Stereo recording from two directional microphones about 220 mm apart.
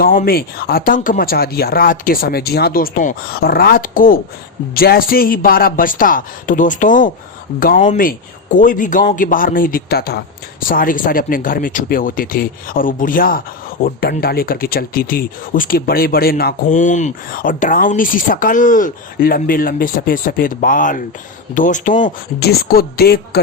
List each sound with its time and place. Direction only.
0.0 s speech: 40° left (ahead or behind)